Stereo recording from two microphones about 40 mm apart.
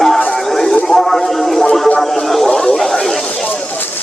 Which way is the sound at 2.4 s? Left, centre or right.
Centre.